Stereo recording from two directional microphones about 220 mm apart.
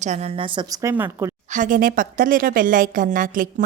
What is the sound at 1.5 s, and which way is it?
A woman's voice, 35° right (ahead or behind).